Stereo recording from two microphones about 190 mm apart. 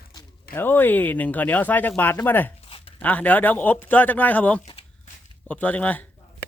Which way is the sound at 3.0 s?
10° left (ahead or behind).